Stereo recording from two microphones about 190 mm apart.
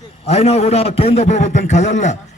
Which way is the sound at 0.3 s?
35° left (ahead or behind).